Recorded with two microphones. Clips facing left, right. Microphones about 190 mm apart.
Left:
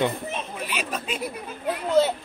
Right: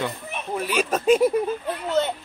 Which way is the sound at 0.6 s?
45° right (ahead or behind).